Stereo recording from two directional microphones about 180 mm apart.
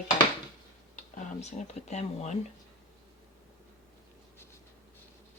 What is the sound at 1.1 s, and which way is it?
Speech, 40° left (ahead or behind).